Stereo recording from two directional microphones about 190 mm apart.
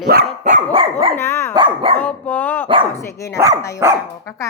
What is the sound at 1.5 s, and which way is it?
Dog, 25° right (ahead or behind).